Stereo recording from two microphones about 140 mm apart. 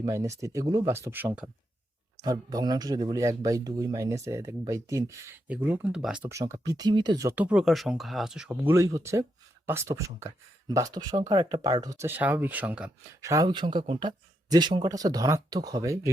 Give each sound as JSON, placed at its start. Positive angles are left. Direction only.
{"t": 0.0, "sound": "speech", "side_deg": -25}
{"t": 2.2, "sound": "speech", "side_deg": -25}
{"t": 5.6, "sound": "speech", "side_deg": -10}
{"t": 6.2, "sound": "speech", "side_deg": -20}
{"t": 7.3, "sound": "speech", "side_deg": -10}
{"t": 8.6, "sound": "speech", "side_deg": -20}
{"t": 13.2, "sound": "speech", "side_deg": -25}